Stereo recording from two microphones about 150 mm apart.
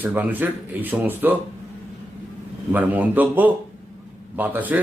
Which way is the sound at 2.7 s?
10° right (ahead or behind).